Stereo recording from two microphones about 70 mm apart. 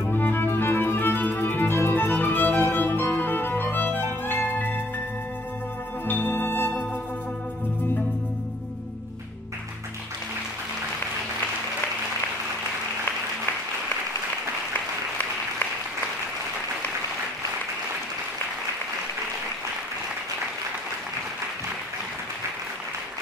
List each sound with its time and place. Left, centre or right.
0.0 s music: left
6.0 s music: left